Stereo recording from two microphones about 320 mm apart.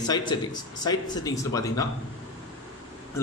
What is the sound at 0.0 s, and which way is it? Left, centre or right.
Speech, centre.